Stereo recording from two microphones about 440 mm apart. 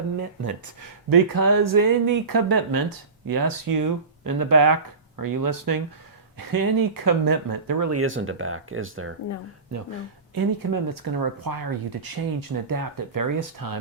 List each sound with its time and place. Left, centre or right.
0.8 s speech: right
7.9 s speech: right
10.3 s speech: right